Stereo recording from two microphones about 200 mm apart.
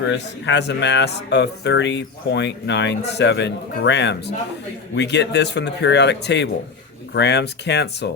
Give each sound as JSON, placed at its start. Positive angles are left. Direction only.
{"t": 0.0, "sound": "speech", "side_deg": 65}